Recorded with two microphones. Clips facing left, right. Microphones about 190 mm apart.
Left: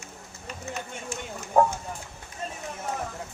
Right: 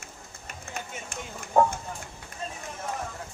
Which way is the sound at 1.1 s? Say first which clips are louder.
Left 3 dB; 55° right (ahead or behind).